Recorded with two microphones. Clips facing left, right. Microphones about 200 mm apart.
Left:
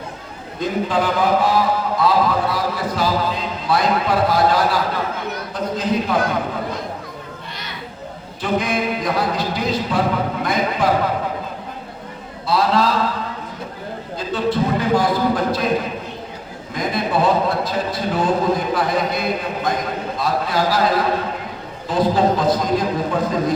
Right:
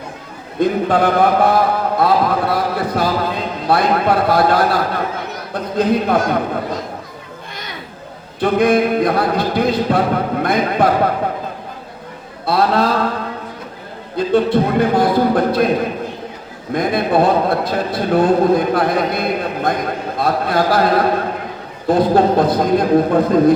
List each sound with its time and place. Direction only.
0.6 s a man's voice: 60° right (ahead or behind)
8.4 s a man's voice: 60° right (ahead or behind)
12.5 s a sound: 55° right (ahead or behind)
14.2 s a man's voice: 55° right (ahead or behind)
16.7 s a man's voice: 55° right (ahead or behind)